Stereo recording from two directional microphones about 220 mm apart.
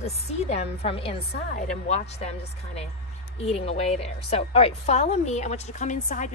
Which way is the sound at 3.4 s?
30° left (ahead or behind).